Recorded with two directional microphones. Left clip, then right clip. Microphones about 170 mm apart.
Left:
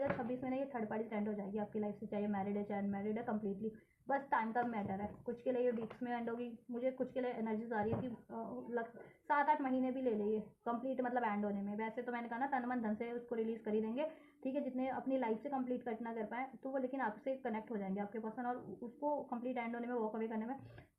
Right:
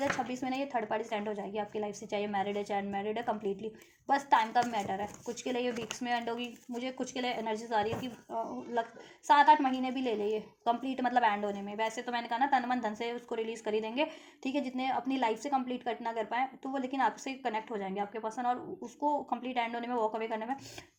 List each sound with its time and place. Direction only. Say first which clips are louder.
0.4 s a woman's voice: right 7 dB; 40° right (ahead or behind)
9.2 s a woman's voice: right 11 dB; 40° right (ahead or behind)